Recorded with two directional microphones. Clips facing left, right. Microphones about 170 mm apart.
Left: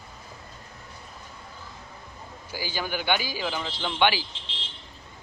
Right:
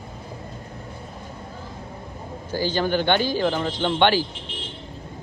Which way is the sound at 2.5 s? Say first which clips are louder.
Right 9 dB; 10° left (ahead or behind).